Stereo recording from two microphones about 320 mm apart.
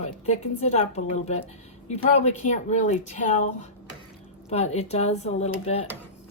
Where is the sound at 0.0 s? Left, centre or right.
Left.